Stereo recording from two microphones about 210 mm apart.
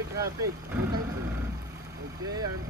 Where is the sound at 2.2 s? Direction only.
20° right (ahead or behind).